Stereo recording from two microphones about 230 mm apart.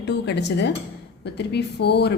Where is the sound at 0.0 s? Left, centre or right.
Left.